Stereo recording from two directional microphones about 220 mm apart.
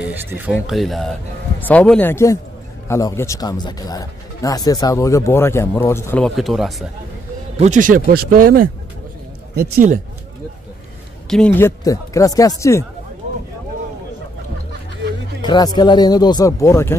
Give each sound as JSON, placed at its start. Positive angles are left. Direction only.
{"t": 0.1, "sound": "speech", "side_deg": -10}
{"t": 7.5, "sound": "speech", "side_deg": -30}
{"t": 11.2, "sound": "speech", "side_deg": 5}
{"t": 15.4, "sound": "speech", "side_deg": 20}